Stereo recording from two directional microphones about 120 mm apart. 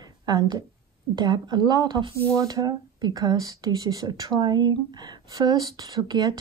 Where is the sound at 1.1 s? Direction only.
40° right (ahead or behind).